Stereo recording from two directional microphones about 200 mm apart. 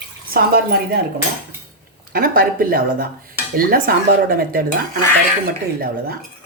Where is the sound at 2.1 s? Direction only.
45° right (ahead or behind).